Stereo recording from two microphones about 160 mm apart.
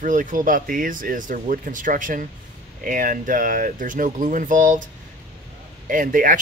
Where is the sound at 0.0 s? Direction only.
55° right (ahead or behind).